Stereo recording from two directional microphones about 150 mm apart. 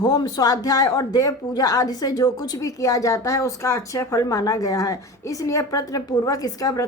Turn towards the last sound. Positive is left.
turn(degrees=25)  # may be behind; listen again after turning